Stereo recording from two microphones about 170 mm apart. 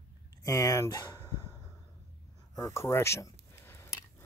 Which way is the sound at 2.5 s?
20° left (ahead or behind).